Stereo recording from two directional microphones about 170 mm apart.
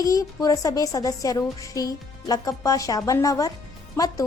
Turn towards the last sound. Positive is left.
turn(degrees=15)  # may be behind; listen again after turning